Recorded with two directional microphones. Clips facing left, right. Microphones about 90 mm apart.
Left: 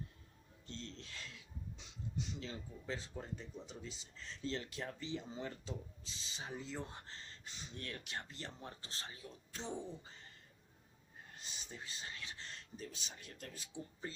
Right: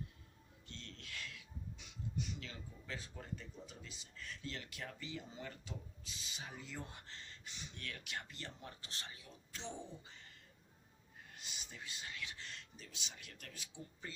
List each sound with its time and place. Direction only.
0.7 s a sound: 30° left (ahead or behind)
2.3 s speech: 25° left (ahead or behind)
11.3 s speech: 35° left (ahead or behind)